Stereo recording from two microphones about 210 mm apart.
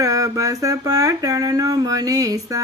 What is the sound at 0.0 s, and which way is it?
Speech, 15° right (ahead or behind).